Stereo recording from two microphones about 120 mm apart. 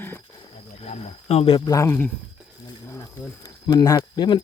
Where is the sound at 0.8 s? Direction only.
65° left (ahead or behind).